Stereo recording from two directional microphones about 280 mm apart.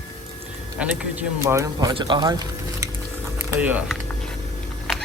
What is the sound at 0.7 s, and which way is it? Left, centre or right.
Speech, centre.